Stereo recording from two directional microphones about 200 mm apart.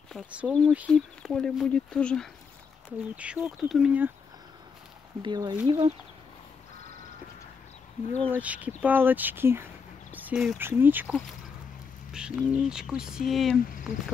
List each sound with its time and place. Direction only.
0.1 s speech: 5° right (ahead or behind)
3.2 s speech: 5° right (ahead or behind)
5.2 s speech: 20° right (ahead or behind)
5.7 s speech: 35° right (ahead or behind)
8.4 s speech: 10° right (ahead or behind)